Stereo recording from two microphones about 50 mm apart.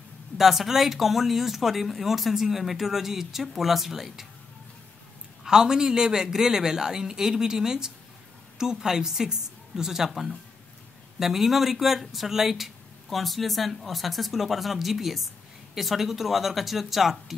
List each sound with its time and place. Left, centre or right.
0.4 s speech: centre
5.4 s a man's voice: centre